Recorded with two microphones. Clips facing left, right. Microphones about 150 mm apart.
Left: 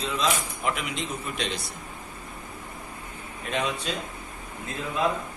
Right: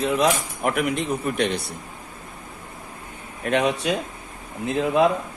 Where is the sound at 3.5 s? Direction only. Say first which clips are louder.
Right 8 dB; 70° right (ahead or behind).